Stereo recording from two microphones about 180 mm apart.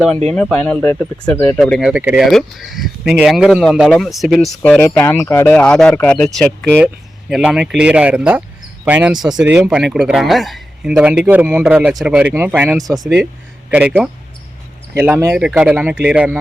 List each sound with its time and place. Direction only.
0.3 s speech: 5° left (ahead or behind)
1.9 s speech: 5° right (ahead or behind)
6.7 s speech: 5° right (ahead or behind)
13.7 s speech: 10° right (ahead or behind)
14.9 s speech: 10° right (ahead or behind)